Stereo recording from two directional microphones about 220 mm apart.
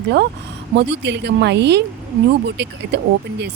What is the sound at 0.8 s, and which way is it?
A woman's voice, 50° right (ahead or behind).